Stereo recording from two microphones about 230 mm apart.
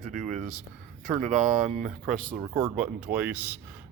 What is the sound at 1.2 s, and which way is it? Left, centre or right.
Speech, right.